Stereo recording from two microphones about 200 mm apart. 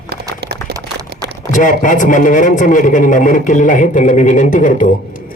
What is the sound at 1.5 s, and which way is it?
A man's voice, 40° left (ahead or behind).